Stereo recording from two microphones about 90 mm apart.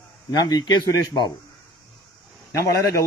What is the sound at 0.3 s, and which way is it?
Speech, 45° left (ahead or behind).